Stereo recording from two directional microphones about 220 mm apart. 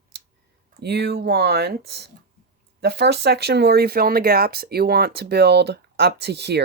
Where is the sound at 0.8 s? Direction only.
50° right (ahead or behind).